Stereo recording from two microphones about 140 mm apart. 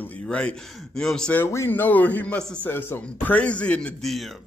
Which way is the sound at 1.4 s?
20° left (ahead or behind).